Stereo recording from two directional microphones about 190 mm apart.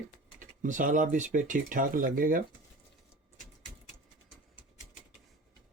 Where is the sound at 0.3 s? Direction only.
45° right (ahead or behind).